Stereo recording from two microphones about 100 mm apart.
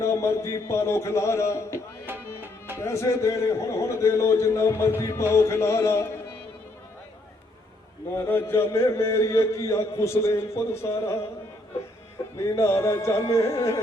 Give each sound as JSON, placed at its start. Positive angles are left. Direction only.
{"t": 0.0, "sound": "a man's voice", "side_deg": 30}
{"t": 8.1, "sound": "a man's voice", "side_deg": 25}
{"t": 12.4, "sound": "a man's voice", "side_deg": 25}